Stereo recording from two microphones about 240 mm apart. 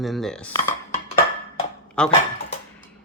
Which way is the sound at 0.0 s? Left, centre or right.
Centre.